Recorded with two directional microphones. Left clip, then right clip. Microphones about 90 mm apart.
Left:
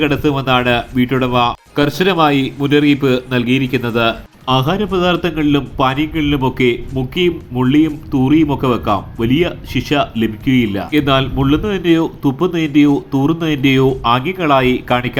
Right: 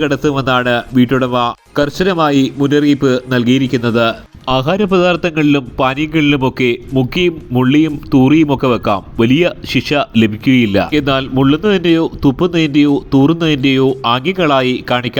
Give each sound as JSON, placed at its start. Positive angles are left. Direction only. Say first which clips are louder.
{"t": 0.0, "sound": "speech", "louder": "right 1 dB", "side_deg": -35}
{"t": 2.0, "sound": "a man's voice", "louder": "even", "side_deg": -25}
{"t": 4.4, "sound": "a man's voice", "louder": "right 2 dB", "side_deg": -60}